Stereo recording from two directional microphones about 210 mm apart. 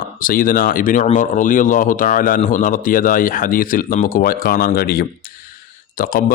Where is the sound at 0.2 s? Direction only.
40° left (ahead or behind).